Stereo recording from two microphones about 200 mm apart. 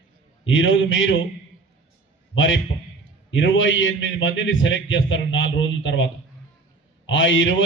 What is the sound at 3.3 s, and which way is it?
A man's voice, 70° left (ahead or behind).